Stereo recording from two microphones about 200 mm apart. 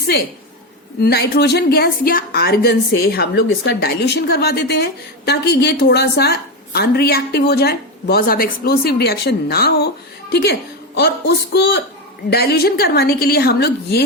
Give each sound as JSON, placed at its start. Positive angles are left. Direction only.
{"t": 1.0, "sound": "a woman's voice", "side_deg": 50}